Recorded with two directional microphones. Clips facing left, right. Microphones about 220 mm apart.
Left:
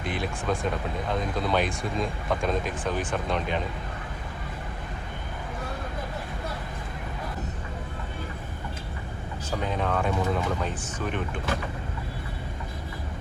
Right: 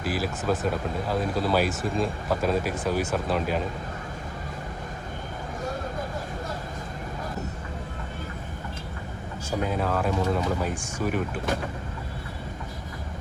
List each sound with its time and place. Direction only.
0.0 s speech: 5° right (ahead or behind)
9.5 s speech: 5° right (ahead or behind)